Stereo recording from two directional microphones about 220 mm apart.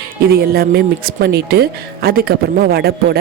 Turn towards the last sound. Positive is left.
turn(degrees=-45)  # may be behind; listen again after turning